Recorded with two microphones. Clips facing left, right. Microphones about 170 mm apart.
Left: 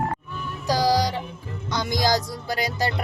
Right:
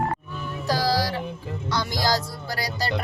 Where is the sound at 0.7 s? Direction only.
15° left (ahead or behind).